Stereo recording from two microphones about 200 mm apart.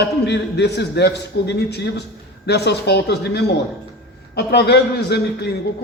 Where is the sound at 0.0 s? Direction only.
60° left (ahead or behind).